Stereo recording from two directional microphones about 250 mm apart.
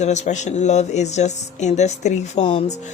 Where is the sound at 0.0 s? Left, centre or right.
Left.